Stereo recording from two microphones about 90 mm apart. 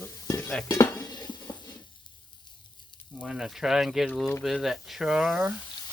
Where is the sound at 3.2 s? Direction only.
5° right (ahead or behind).